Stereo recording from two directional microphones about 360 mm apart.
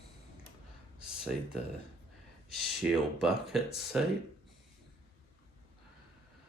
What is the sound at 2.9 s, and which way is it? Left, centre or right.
Speech, centre.